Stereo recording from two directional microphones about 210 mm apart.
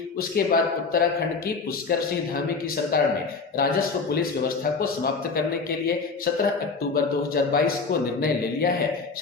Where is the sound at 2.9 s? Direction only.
45° left (ahead or behind).